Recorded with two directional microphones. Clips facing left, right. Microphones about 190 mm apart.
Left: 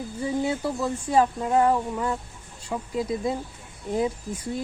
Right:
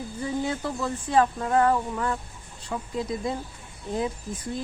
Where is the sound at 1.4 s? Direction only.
20° left (ahead or behind).